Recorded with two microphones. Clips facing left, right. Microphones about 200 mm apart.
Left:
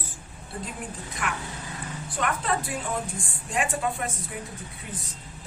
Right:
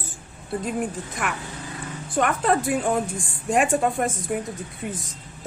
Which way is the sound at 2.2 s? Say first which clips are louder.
Right 7 dB; 50° right (ahead or behind).